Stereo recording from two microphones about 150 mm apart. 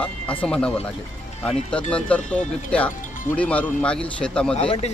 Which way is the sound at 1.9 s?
10° left (ahead or behind).